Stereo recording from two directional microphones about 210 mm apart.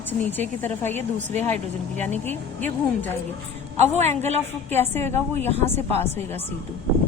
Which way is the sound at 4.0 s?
30° right (ahead or behind).